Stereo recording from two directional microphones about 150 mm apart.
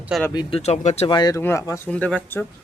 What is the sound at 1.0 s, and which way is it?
Speech, 30° left (ahead or behind).